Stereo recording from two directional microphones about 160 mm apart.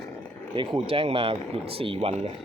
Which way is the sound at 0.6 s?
35° right (ahead or behind).